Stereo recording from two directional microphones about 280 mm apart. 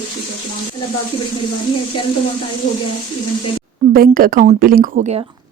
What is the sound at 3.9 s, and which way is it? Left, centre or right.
A woman's voice, right.